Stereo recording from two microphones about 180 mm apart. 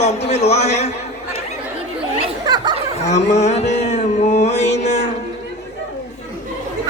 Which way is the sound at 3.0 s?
40° left (ahead or behind).